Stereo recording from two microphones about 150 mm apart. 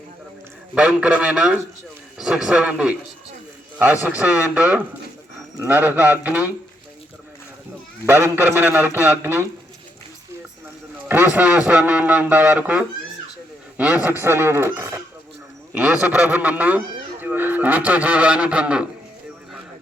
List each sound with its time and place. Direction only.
0.7 s a man's voice: 5° right (ahead or behind)
4.0 s a man's voice: 10° right (ahead or behind)
8.0 s a man's voice: 15° right (ahead or behind)
11.1 s a man's voice: 10° right (ahead or behind)